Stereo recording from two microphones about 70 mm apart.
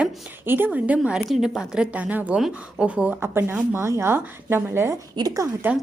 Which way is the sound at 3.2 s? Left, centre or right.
Right.